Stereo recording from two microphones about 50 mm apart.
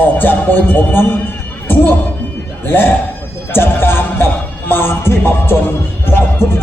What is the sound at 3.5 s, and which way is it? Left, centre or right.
Music, left.